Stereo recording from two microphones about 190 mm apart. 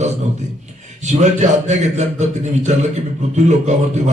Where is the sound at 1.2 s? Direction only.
40° right (ahead or behind).